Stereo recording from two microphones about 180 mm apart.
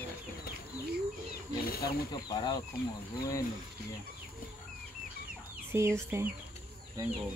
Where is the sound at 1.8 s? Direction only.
20° left (ahead or behind).